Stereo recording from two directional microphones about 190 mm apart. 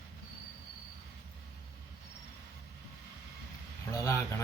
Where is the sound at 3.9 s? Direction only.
15° left (ahead or behind).